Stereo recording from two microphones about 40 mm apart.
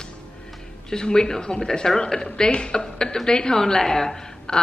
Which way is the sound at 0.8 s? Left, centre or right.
Centre.